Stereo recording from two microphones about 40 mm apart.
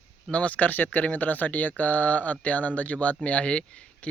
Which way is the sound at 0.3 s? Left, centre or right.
Left.